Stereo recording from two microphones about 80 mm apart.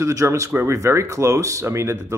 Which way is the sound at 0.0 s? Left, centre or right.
Right.